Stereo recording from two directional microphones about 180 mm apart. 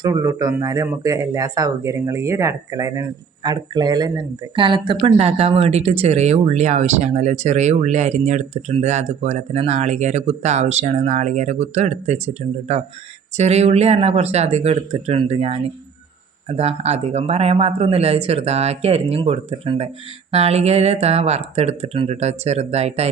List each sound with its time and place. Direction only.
0.0 s speech: 20° right (ahead or behind); by 23.0 s 35° right (ahead or behind)